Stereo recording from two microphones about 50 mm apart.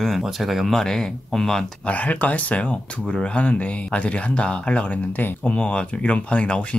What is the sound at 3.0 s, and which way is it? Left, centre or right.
Speech, centre.